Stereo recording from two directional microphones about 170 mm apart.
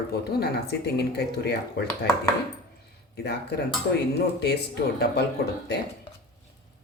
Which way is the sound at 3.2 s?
75° left (ahead or behind).